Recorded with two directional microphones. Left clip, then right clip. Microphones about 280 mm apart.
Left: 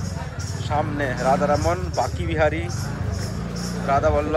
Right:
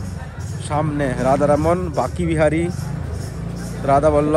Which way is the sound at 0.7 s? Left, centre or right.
Centre.